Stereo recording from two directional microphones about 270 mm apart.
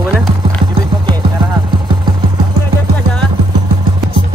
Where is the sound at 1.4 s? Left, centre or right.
Centre.